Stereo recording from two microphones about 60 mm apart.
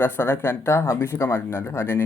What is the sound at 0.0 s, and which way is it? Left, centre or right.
Speech, left.